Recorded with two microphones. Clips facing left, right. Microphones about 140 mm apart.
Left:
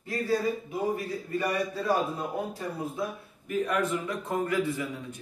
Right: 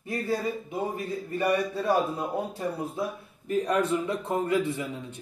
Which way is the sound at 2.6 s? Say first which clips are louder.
Right 2 dB; 30° right (ahead or behind).